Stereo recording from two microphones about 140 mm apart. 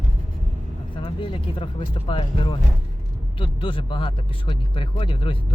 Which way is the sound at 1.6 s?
40° left (ahead or behind).